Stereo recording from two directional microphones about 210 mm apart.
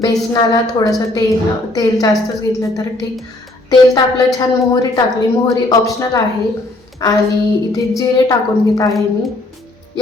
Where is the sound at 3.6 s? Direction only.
15° left (ahead or behind).